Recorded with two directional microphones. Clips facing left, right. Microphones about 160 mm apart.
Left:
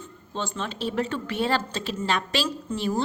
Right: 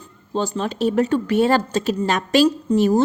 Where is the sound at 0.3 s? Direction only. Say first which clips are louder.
Right 9 dB; 40° right (ahead or behind).